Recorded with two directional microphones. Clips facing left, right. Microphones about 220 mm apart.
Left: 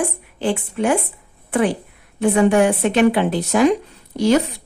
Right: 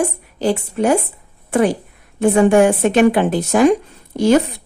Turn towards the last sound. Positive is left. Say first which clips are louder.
# right 2 dB
turn(degrees=-55)  # may be behind; listen again after turning